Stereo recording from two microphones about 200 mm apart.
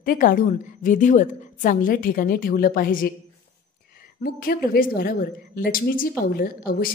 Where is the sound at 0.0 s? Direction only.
45° left (ahead or behind).